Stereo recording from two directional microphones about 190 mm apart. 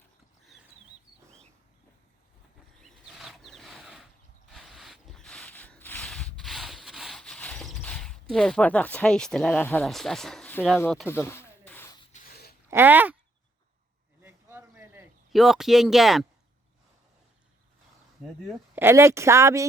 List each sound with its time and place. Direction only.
2.8 s wild animals: centre (ahead or behind)
4.5 s a sound: centre (ahead or behind)
11.1 s rub: 10° left (ahead or behind)
12.1 s dog: 50° left (ahead or behind)
12.7 s speech: 10° right (ahead or behind)
14.2 s a sound: 10° right (ahead or behind)
15.3 s speech: centre (ahead or behind)
18.7 s speech: 10° right (ahead or behind)